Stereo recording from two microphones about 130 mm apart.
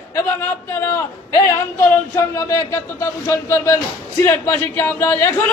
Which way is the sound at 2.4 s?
25° left (ahead or behind).